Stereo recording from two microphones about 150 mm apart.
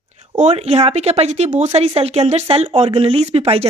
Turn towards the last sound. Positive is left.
turn(degrees=-40)  # may be behind; listen again after turning